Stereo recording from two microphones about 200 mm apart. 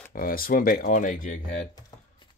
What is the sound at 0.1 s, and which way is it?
Speech, 45° left (ahead or behind).